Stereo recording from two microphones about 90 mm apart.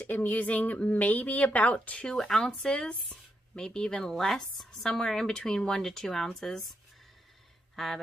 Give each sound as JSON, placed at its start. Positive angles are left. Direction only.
{"t": 0.0, "sound": "a woman's voice", "side_deg": 20}
{"t": 7.7, "sound": "speech", "side_deg": 0}